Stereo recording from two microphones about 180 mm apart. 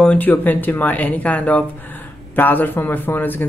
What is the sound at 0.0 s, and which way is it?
Speech, 10° left (ahead or behind).